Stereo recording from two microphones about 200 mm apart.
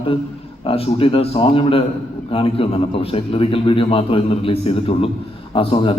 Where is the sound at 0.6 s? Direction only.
25° left (ahead or behind).